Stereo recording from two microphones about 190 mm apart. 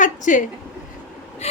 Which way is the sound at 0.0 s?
40° left (ahead or behind).